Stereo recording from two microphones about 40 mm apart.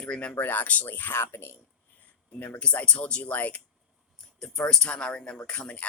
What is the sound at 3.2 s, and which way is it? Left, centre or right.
Speech, left.